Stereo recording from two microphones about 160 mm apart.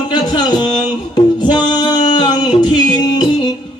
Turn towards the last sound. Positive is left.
turn(degrees=25)  # may be behind; listen again after turning